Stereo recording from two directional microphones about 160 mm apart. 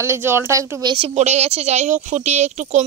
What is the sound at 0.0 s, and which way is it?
Speech, 15° right (ahead or behind).